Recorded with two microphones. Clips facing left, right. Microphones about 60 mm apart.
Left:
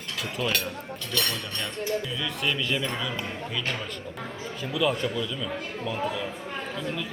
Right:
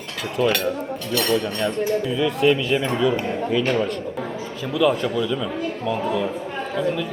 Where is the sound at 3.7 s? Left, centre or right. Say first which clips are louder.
Right 12 dB; right.